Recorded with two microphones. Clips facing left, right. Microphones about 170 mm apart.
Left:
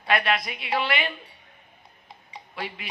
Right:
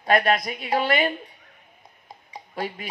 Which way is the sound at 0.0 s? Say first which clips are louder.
Right 4 dB; 45° right (ahead or behind).